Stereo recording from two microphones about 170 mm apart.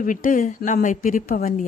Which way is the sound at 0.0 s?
50° left (ahead or behind).